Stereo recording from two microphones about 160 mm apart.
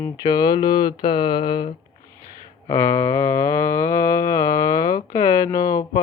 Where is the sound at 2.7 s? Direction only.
15° left (ahead or behind).